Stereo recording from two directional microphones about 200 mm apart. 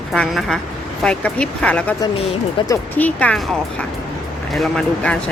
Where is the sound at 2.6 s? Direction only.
25° left (ahead or behind).